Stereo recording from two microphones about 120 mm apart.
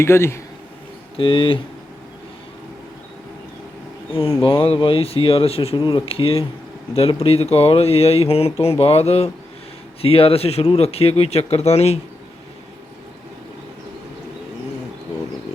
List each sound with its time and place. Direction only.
0.0 s speech: 20° left (ahead or behind)
1.1 s speech: 45° left (ahead or behind)
4.1 s speech: 50° left (ahead or behind)